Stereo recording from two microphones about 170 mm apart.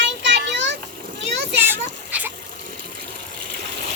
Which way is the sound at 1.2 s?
90° right.